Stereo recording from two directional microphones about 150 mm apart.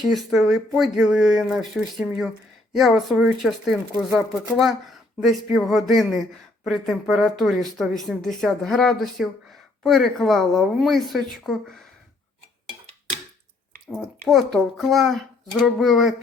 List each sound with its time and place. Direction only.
0.1 s speech: centre (ahead or behind)
13.8 s speech: centre (ahead or behind)